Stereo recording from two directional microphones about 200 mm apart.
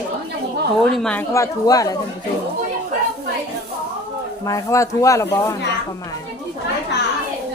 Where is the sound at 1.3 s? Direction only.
15° left (ahead or behind).